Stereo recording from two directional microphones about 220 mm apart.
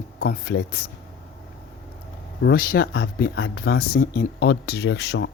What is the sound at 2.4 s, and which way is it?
Speech, 45° left (ahead or behind).